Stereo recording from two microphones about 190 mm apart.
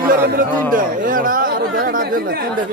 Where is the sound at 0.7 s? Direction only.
45° right (ahead or behind).